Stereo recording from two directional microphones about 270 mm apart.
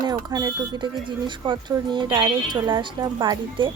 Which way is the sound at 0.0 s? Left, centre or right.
Centre.